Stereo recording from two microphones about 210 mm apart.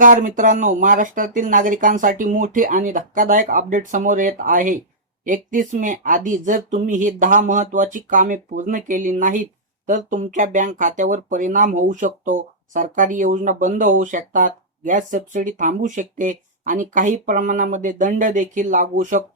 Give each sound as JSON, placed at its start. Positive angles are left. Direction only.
{"t": 0.0, "sound": "speech", "side_deg": -40}